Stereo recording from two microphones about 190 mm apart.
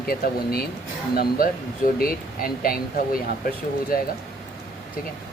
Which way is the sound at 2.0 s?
50° left (ahead or behind).